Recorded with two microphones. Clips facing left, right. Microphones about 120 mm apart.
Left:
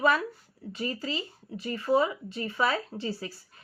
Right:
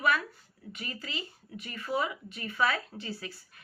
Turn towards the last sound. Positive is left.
turn(degrees=30)  # may be behind; listen again after turning